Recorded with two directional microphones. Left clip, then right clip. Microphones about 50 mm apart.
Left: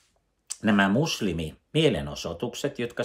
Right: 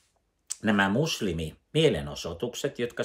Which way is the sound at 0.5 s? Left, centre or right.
Left.